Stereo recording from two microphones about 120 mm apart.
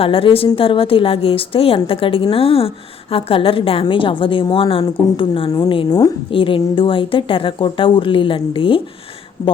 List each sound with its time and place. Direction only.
0.0 s a woman's voice: 50° left (ahead or behind)